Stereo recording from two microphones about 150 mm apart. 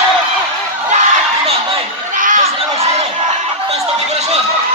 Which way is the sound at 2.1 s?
60° right (ahead or behind).